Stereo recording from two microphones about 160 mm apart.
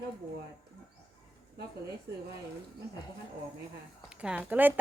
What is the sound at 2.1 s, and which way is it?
Speech, 90° right.